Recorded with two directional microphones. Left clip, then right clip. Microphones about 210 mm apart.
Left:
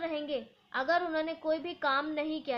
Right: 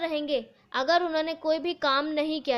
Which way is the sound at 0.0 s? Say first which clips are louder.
Right 6 dB; 45° right (ahead or behind).